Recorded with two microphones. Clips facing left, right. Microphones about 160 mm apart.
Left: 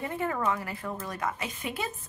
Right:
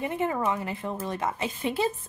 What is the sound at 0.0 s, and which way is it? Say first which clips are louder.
A woman's voice: right 3 dB; 20° right (ahead or behind).